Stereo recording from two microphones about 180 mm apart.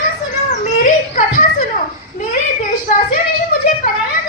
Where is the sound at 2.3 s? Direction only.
50° left (ahead or behind).